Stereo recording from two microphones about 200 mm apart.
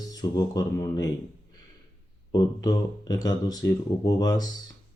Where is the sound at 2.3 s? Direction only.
20° left (ahead or behind).